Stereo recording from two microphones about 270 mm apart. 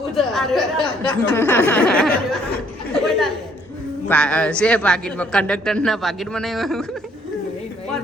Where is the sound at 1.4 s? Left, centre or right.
Centre.